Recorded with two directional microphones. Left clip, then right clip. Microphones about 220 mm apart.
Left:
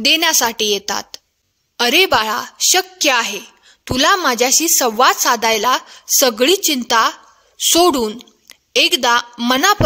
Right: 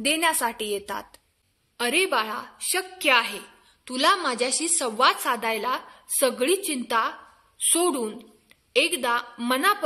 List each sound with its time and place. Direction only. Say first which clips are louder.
0.0 s a woman's voice: left 9 dB; 40° left (ahead or behind)